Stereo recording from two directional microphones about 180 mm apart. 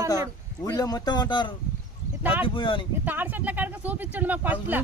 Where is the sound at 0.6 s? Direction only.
20° left (ahead or behind).